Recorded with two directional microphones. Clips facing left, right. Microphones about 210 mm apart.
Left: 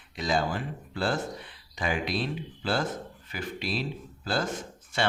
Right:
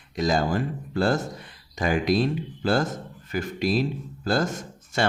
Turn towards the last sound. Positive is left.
turn(degrees=-45)  # may be behind; listen again after turning